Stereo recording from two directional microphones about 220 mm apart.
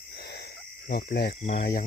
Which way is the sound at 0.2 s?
45° left (ahead or behind).